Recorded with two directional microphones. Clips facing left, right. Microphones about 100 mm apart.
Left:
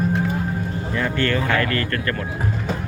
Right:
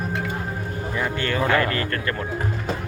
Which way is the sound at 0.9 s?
15° right (ahead or behind).